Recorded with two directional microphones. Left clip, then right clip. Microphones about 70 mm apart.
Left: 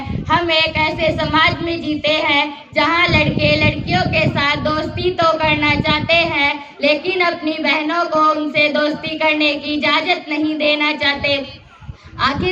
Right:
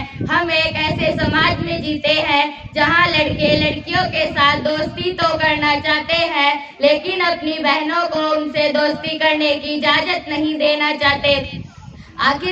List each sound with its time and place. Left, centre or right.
0.3 s child singing: right
10.6 s speech: right
12.2 s child singing: right